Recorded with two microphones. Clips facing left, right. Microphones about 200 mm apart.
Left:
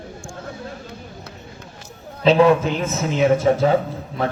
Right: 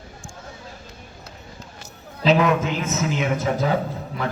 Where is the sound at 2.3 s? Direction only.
30° left (ahead or behind).